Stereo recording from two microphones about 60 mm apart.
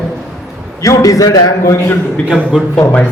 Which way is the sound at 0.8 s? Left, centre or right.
Left.